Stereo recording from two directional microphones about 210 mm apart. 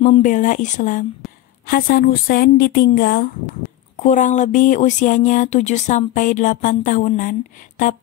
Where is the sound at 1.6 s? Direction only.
45° left (ahead or behind).